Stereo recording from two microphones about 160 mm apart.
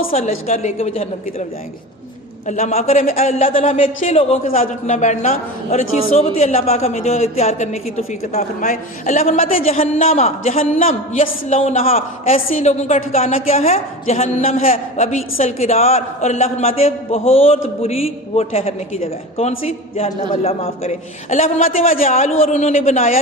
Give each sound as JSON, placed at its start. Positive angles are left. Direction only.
{"t": 0.2, "sound": "a man's voice", "side_deg": 45}
{"t": 2.5, "sound": "a man's voice", "side_deg": 45}
{"t": 9.7, "sound": "a woman's voice", "side_deg": 40}
{"t": 14.7, "sound": "a woman's voice", "side_deg": 45}